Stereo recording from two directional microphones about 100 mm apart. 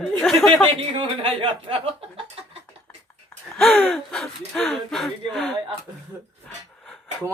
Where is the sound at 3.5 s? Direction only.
Centre (ahead or behind).